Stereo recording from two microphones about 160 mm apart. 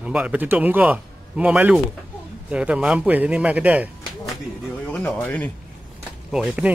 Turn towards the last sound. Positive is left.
turn(degrees=-5)  # may be behind; listen again after turning